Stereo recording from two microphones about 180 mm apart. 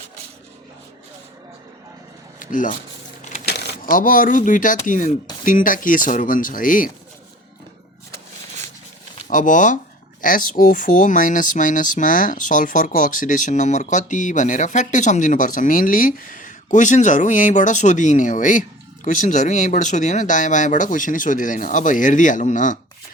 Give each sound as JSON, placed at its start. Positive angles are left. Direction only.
{"t": 2.4, "sound": "speech", "side_deg": 45}
{"t": 9.3, "sound": "speech", "side_deg": 45}